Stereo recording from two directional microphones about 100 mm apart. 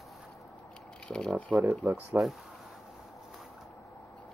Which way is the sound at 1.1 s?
5° left (ahead or behind).